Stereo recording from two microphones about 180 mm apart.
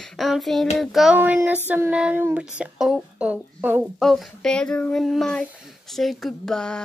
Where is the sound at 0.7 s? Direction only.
Centre (ahead or behind).